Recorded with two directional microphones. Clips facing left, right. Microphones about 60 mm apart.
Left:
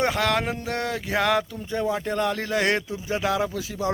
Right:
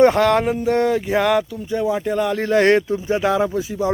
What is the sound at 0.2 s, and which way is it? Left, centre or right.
Speech, right.